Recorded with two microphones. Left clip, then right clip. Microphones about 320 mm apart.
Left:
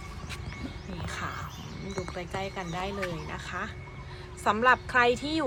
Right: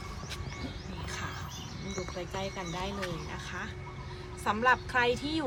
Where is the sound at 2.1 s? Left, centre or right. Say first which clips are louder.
Left 2 dB; centre.